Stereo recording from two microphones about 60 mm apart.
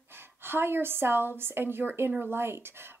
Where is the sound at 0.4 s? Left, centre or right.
Right.